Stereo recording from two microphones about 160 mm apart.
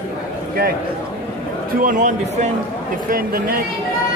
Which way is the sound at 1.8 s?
55° right (ahead or behind).